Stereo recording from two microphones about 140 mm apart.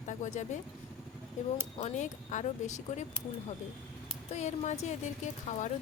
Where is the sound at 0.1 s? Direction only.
60° left (ahead or behind).